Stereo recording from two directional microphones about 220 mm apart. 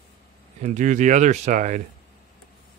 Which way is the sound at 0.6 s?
35° right (ahead or behind).